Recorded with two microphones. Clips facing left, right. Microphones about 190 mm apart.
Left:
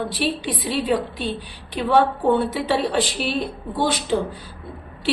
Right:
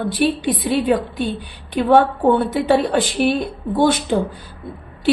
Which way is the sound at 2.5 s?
50° right (ahead or behind).